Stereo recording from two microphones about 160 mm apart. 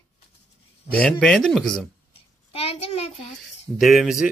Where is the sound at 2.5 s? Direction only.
40° left (ahead or behind).